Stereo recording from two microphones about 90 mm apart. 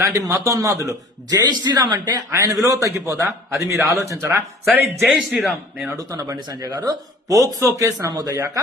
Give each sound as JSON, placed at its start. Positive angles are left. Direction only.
{"t": 0.0, "sound": "speech", "side_deg": -35}
{"t": 2.3, "sound": "speech", "side_deg": -40}
{"t": 4.7, "sound": "speech", "side_deg": -25}
{"t": 5.0, "sound": "a man's voice", "side_deg": -5}
{"t": 6.0, "sound": "speech", "side_deg": -40}